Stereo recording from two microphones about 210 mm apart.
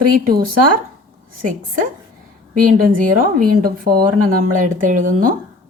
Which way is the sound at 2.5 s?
40° right (ahead or behind).